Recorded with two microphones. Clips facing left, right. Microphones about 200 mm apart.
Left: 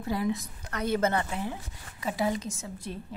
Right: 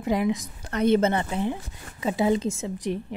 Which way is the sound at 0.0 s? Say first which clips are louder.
Right 5 dB; 15° right (ahead or behind).